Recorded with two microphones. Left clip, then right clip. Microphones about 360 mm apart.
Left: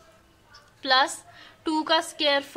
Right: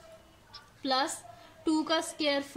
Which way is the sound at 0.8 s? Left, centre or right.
Left.